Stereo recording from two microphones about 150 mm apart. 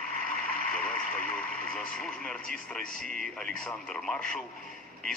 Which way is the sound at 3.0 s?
65° right (ahead or behind).